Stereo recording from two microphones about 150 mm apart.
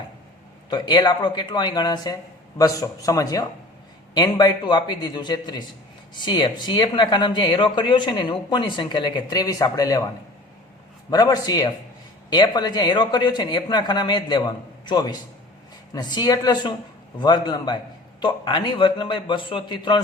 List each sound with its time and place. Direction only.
0.7 s speech: 30° left (ahead or behind)
11.1 s speech: 25° left (ahead or behind)